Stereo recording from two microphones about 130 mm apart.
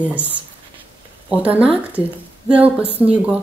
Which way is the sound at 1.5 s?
10° right (ahead or behind).